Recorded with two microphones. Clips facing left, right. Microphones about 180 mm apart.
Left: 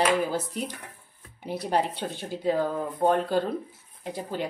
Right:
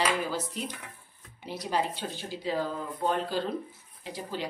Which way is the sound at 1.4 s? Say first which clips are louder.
Left 4 dB; 60° left (ahead or behind).